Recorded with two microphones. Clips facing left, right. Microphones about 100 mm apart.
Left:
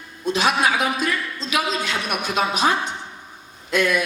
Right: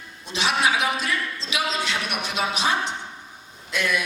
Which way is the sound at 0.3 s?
45° left (ahead or behind).